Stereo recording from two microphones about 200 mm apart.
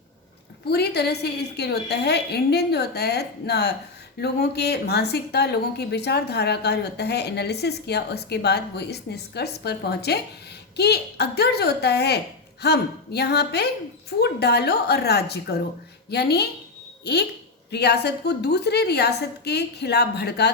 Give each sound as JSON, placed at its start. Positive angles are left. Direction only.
{"t": 0.6, "sound": "speech", "side_deg": 55}